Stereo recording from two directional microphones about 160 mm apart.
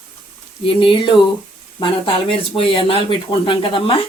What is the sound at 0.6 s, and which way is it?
Speech, 30° left (ahead or behind).